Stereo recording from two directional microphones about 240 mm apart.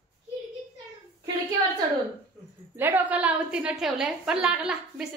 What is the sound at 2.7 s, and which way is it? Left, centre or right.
A woman's voice, centre.